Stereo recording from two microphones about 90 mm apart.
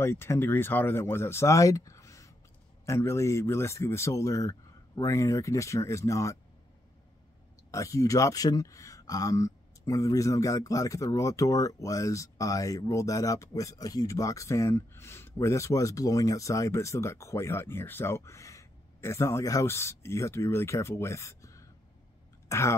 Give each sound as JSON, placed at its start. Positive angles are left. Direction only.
{"t": 0.0, "sound": "speech", "side_deg": 25}
{"t": 7.7, "sound": "speech", "side_deg": 35}